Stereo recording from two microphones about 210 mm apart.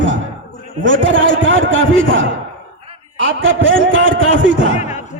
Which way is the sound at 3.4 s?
65° right (ahead or behind).